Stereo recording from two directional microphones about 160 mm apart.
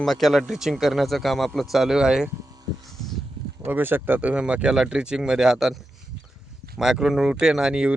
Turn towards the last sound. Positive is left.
turn(degrees=-5)  # may be behind; listen again after turning